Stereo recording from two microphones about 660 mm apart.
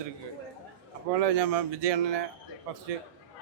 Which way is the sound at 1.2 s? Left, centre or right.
Right.